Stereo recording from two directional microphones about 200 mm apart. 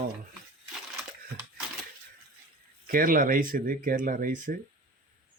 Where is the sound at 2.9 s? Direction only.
45° right (ahead or behind).